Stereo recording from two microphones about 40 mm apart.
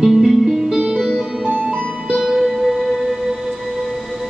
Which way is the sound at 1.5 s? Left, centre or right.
Right.